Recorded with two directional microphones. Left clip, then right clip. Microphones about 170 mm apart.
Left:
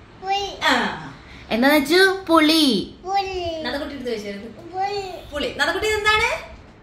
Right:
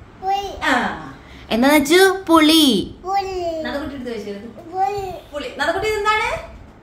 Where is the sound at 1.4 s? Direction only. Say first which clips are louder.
Right 2 dB; 10° right (ahead or behind).